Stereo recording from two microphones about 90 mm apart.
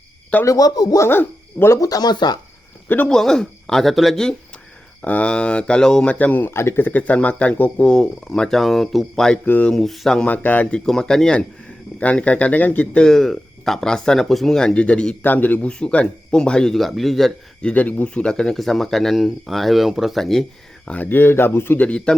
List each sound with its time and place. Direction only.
0.4 s a man's voice: 40° left (ahead or behind)
1.0 s speech: 25° left (ahead or behind)
1.8 s a man's voice: 45° left (ahead or behind)
3.1 s speech: 5° left (ahead or behind)
5.0 s speech: 15° left (ahead or behind)
9.4 s speech: 15° left (ahead or behind)
9.7 s speech: centre (ahead or behind)
10.2 s speech: 20° left (ahead or behind)
13.1 s speech: 5° left (ahead or behind)
20.8 s speech: 15° left (ahead or behind)
21.8 s speech: 10° left (ahead or behind)